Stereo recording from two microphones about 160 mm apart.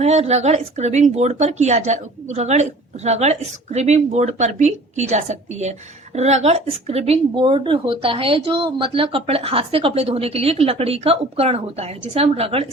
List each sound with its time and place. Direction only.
0.0 s a woman's voice: 45° right (ahead or behind)